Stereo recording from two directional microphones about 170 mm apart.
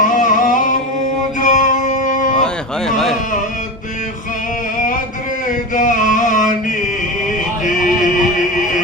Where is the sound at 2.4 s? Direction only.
Centre (ahead or behind).